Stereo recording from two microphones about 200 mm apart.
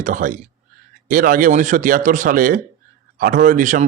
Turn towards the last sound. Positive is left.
turn(degrees=-40)  # may be behind; listen again after turning